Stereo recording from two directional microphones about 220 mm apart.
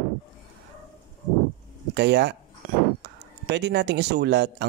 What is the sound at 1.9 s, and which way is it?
Speech, 50° right (ahead or behind).